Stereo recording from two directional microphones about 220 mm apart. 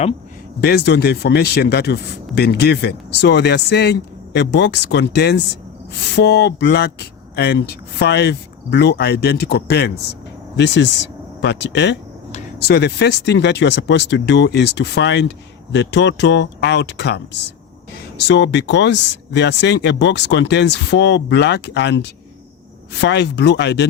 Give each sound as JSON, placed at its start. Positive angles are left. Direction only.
{"t": 0.6, "sound": "speech", "side_deg": 50}